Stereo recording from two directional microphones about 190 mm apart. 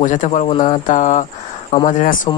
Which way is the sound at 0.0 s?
40° left (ahead or behind).